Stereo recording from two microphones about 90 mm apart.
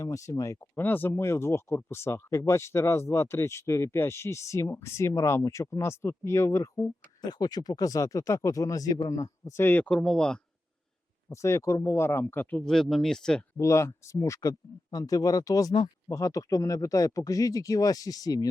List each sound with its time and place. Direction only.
0.0 s speech: 35° left (ahead or behind)
0.8 s speech: 20° left (ahead or behind)
7.3 s speech: 45° left (ahead or behind); by 9.8 s 30° left (ahead or behind)
9.8 s speech: 10° left (ahead or behind)
11.3 s speech: 35° left (ahead or behind)
12.5 s speech: 5° left (ahead or behind)
13.6 s speech: 35° left (ahead or behind)